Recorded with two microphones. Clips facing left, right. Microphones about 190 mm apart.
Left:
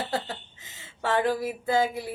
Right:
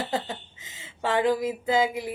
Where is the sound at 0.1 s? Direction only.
15° right (ahead or behind).